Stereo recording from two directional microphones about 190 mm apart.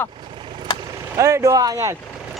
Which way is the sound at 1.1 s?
15° right (ahead or behind).